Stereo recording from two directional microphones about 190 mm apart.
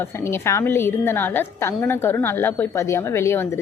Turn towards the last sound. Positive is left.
turn(degrees=15)  # may be behind; listen again after turning